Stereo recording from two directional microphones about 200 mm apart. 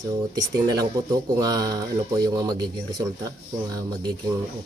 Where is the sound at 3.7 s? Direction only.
20° right (ahead or behind).